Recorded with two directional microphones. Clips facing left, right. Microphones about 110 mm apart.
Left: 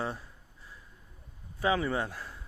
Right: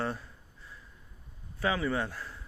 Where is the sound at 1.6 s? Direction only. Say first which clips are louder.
Left 1 dB; 20° left (ahead or behind).